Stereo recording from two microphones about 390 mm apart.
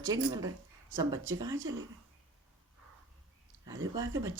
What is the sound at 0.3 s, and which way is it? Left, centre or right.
Speech, centre.